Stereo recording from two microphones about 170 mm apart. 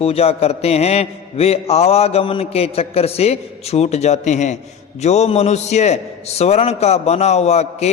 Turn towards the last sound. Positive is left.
turn(degrees=40)  # may be behind; listen again after turning